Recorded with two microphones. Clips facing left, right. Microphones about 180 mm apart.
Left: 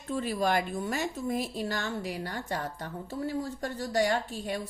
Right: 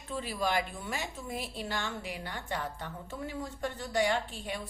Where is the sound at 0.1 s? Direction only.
45° left (ahead or behind).